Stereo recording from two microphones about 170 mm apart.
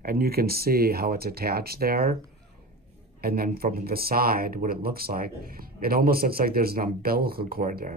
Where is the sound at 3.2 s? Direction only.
60° right (ahead or behind).